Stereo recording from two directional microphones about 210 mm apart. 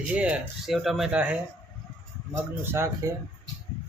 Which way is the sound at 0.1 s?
5° right (ahead or behind).